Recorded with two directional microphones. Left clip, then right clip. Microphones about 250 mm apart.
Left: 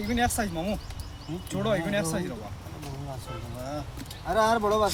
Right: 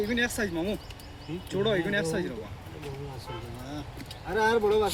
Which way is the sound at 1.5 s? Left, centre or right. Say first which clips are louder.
Right 1 dB; left.